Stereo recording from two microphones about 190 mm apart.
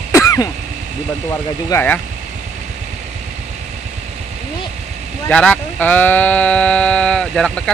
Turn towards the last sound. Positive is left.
turn(degrees=5)  # may be behind; listen again after turning